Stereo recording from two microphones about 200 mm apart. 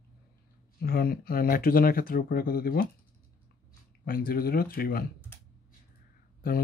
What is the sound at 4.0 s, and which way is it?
Speech, 45° left (ahead or behind).